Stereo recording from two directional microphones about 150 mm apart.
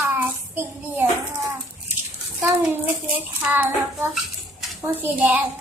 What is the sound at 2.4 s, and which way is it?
Child singing, 10° right (ahead or behind).